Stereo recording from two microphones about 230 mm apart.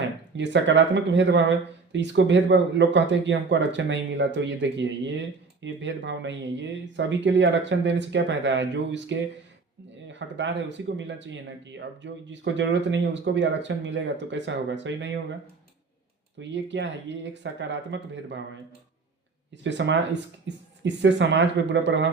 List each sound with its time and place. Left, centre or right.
0.3 s speech: right
16.4 s speech: right
19.6 s speech: right